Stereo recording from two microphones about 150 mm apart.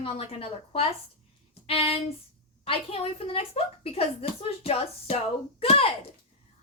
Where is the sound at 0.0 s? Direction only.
45° left (ahead or behind).